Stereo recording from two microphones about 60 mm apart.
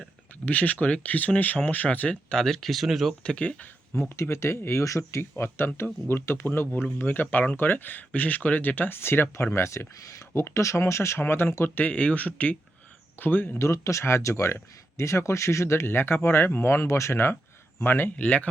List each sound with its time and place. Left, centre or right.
0.4 s speech: left
2.3 s speech: centre
3.2 s speech: left
4.1 s speech: left
5.4 s speech: left
13.6 s speech: left
18.2 s speech: left